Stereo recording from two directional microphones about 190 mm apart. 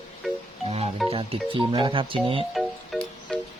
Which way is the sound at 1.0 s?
30° right (ahead or behind).